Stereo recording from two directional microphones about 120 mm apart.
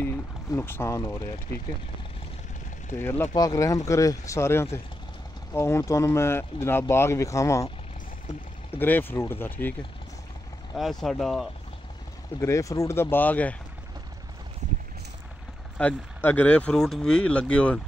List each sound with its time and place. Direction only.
0.6 s speech: 20° left (ahead or behind)
3.0 s speech: 20° left (ahead or behind)
3.3 s speech: 30° left (ahead or behind)
8.7 s speech: 15° left (ahead or behind)
10.8 s speech: centre (ahead or behind)
12.4 s speech: 25° left (ahead or behind)
15.8 s speech: 15° left (ahead or behind)